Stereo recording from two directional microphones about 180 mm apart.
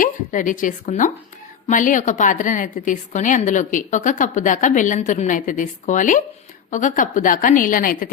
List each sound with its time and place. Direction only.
0.0 s a woman's voice: 45° left (ahead or behind)